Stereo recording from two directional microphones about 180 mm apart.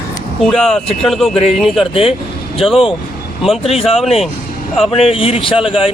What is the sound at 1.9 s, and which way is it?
Speech, 30° left (ahead or behind).